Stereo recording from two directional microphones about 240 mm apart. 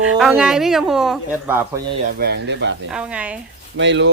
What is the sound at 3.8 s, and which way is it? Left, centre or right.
Speech, right.